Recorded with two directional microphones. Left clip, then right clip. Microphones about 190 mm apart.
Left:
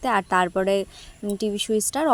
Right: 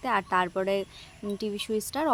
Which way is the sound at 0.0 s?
30° left (ahead or behind).